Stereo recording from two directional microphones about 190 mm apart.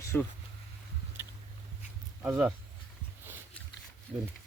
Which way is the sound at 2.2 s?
10° right (ahead or behind).